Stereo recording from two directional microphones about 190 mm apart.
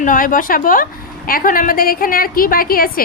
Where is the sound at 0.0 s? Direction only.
45° left (ahead or behind).